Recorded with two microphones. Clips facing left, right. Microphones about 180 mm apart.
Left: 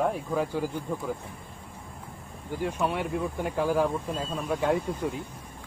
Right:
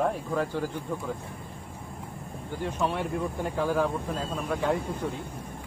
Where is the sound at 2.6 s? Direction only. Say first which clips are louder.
Left 1 dB; 5° left (ahead or behind).